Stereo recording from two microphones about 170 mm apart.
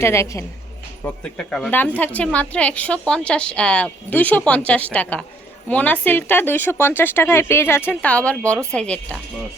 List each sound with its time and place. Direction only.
0.0 s a woman's voice: 15° left (ahead or behind)
1.0 s a woman's voice: 5° left (ahead or behind)